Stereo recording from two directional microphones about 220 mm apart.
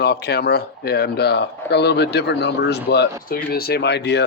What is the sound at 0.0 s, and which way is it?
Speech, 50° left (ahead or behind).